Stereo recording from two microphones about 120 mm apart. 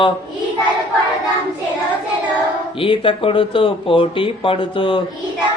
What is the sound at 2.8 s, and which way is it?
Speech, 45° left (ahead or behind).